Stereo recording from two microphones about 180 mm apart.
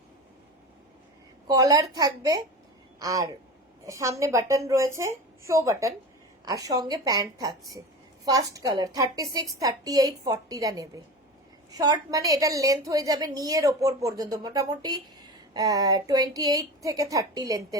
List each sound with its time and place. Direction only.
1.5 s a woman's voice: 20° right (ahead or behind)